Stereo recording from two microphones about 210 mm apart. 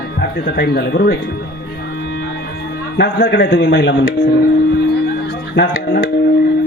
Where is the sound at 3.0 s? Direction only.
50° left (ahead or behind).